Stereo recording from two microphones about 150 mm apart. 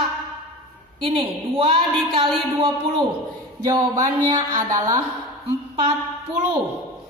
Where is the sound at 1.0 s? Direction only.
35° right (ahead or behind).